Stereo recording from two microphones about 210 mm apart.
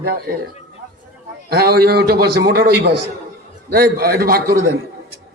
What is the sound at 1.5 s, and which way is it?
A man's voice, 50° right (ahead or behind).